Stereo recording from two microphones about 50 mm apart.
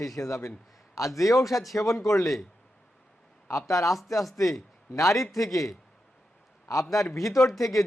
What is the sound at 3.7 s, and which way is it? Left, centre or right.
Speech, left.